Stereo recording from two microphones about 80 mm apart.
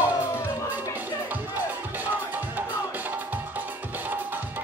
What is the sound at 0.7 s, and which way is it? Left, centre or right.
Music, right.